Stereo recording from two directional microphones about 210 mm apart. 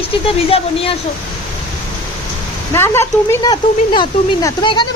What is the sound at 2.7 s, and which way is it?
Speech, 10° left (ahead or behind).